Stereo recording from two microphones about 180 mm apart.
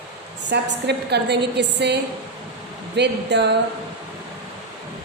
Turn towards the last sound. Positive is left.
turn(degrees=-70)  # may be behind; listen again after turning